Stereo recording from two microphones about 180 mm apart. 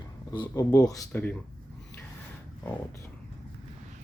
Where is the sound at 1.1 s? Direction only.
10° left (ahead or behind).